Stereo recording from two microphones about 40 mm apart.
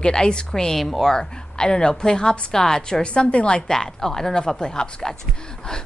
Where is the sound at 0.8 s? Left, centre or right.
Centre.